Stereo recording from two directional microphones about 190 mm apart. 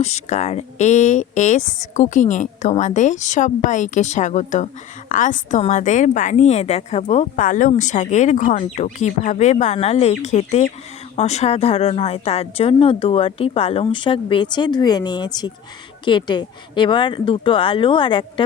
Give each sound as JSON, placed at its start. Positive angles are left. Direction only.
{"t": 0.0, "sound": "a woman's voice", "side_deg": 35}